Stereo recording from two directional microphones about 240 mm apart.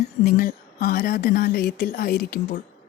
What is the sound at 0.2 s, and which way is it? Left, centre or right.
Speech, left.